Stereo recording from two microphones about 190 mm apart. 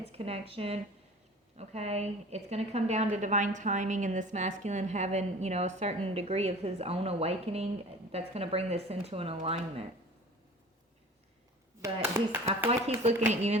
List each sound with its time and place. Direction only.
0.1 s a woman's voice: 30° right (ahead or behind)
11.8 s speech: 10° right (ahead or behind)
12.5 s a woman's voice: 35° right (ahead or behind)